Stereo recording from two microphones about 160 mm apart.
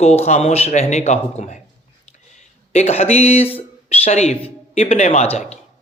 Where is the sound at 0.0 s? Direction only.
40° left (ahead or behind).